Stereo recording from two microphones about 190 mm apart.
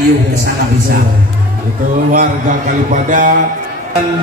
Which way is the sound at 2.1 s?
45° right (ahead or behind).